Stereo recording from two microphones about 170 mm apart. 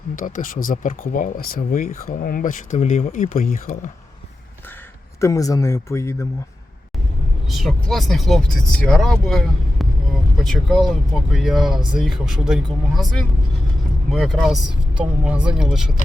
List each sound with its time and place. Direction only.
0.2 s speech: 55° left (ahead or behind)
5.2 s speech: 20° left (ahead or behind)
7.5 s speech: centre (ahead or behind)